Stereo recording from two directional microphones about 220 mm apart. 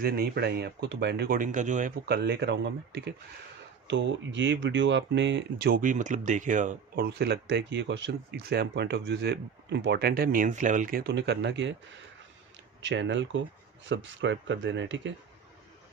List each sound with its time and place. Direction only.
0.0 s speech: 45° right (ahead or behind)
12.8 s speech: 55° right (ahead or behind)